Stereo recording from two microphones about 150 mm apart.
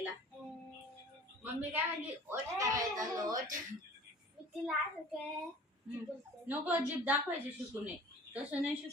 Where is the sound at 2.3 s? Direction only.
20° right (ahead or behind).